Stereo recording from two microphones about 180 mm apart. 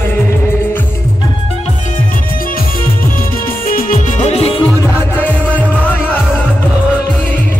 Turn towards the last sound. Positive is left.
turn(degrees=10)  # may be behind; listen again after turning